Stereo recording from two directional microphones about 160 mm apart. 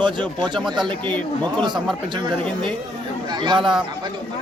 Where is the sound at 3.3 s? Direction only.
30° right (ahead or behind).